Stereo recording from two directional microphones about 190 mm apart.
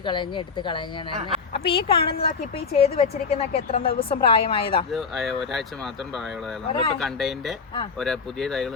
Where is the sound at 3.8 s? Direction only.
50° left (ahead or behind).